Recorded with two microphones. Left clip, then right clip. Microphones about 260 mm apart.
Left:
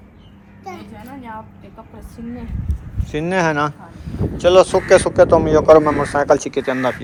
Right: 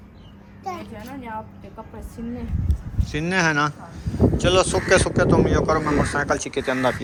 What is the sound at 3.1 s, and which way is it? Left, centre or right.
Speech, centre.